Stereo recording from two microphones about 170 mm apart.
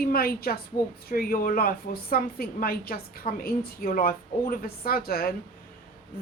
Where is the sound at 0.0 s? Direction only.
60° left (ahead or behind).